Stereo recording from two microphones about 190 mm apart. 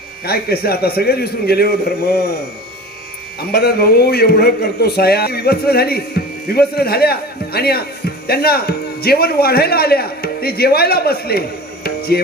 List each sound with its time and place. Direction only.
0.3 s a man's voice: 55° left (ahead or behind)
3.5 s a man's voice: 55° left (ahead or behind)